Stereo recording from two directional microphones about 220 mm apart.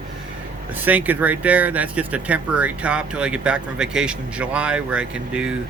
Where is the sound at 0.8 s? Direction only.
10° right (ahead or behind).